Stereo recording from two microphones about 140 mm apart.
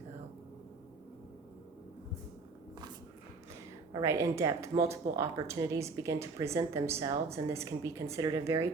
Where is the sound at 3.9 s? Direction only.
25° right (ahead or behind).